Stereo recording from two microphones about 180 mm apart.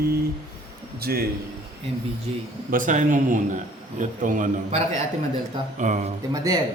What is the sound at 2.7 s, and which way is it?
A man's voice, 45° right (ahead or behind).